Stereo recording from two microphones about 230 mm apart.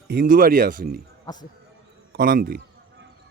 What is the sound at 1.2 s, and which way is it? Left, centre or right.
Speech, centre.